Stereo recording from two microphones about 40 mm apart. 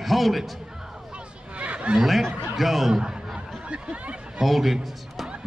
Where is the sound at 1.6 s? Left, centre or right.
Right.